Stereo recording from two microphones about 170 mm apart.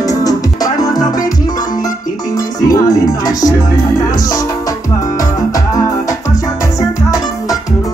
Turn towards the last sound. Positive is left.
turn(degrees=20)  # may be behind; listen again after turning